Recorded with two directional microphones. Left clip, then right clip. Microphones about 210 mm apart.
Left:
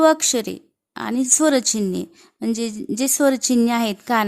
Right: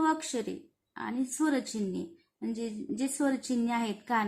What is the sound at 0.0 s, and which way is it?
A woman's voice, 55° left (ahead or behind).